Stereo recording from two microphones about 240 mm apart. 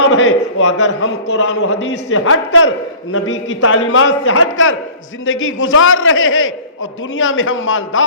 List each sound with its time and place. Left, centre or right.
0.1 s a man's voice: left